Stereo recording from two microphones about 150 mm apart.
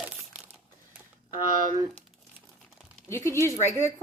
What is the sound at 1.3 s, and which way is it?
Speech, 65° right (ahead or behind).